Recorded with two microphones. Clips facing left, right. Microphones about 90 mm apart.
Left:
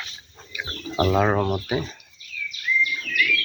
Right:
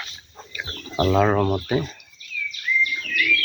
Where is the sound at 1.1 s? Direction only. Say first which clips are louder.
Right 3 dB; 10° left (ahead or behind).